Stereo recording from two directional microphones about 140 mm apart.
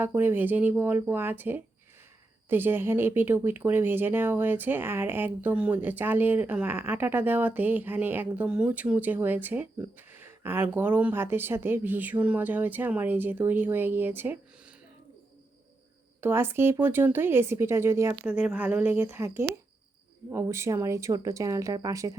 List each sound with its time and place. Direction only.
0.0 s speech: 15° right (ahead or behind)
16.2 s speech: 15° right (ahead or behind)
18.2 s speech: 10° right (ahead or behind); by 22.1 s 25° right (ahead or behind)